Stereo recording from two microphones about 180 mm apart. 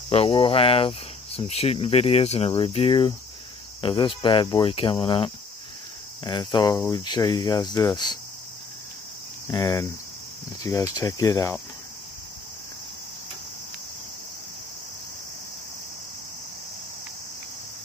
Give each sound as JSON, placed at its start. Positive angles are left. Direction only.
{"t": 0.1, "sound": "speech", "side_deg": 30}
{"t": 3.8, "sound": "cricket", "side_deg": 30}
{"t": 9.5, "sound": "speech", "side_deg": 15}